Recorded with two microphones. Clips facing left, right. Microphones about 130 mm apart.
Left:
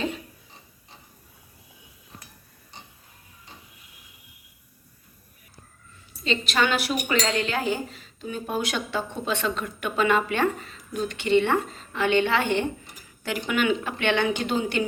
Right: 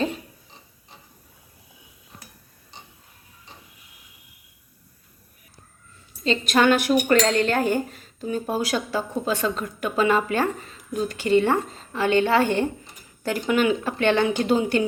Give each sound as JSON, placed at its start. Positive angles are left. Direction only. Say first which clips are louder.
{"t": 6.2, "sound": "speech", "louder": "right 5 dB", "side_deg": -45}
{"t": 8.4, "sound": "speech", "louder": "right 1 dB", "side_deg": -35}